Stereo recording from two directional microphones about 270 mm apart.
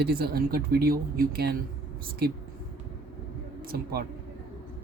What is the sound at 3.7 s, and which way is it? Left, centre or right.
Speech, right.